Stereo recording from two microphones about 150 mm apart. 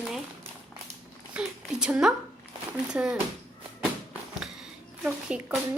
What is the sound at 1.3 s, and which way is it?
Speech, 5° right (ahead or behind).